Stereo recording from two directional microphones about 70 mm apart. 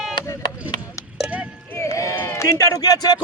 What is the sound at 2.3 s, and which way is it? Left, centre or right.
Speech, left.